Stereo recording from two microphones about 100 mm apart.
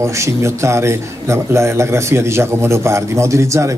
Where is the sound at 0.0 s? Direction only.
30° right (ahead or behind).